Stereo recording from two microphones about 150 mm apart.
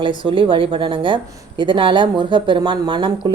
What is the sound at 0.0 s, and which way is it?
Speech, 35° right (ahead or behind).